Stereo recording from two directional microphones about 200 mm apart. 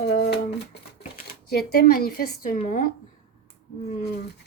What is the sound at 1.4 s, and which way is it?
Speech, 50° left (ahead or behind).